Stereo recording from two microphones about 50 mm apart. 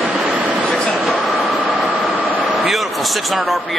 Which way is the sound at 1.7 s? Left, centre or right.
Centre.